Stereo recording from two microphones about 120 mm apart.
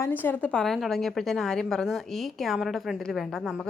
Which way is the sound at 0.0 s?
15° left (ahead or behind).